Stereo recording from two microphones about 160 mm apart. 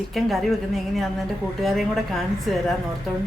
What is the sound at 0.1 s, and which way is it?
Speech, centre (ahead or behind).